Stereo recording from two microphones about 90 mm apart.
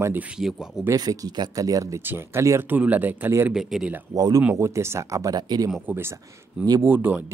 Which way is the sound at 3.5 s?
5° right (ahead or behind).